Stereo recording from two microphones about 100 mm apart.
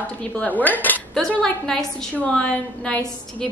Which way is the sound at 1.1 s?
5° left (ahead or behind).